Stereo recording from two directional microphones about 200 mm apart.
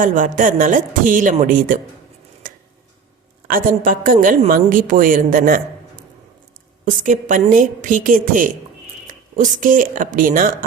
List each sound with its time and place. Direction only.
0.0 s speech: 40° right (ahead or behind)
2.4 s a sound: 40° right (ahead or behind)
3.4 s a woman's voice: 45° right (ahead or behind)